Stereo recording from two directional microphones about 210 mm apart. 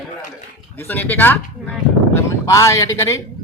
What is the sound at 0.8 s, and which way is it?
A man's voice, 10° left (ahead or behind).